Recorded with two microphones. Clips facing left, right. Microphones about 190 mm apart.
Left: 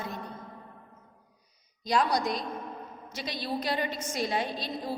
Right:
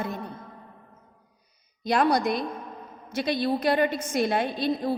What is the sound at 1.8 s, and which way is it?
A woman's voice, 60° right (ahead or behind).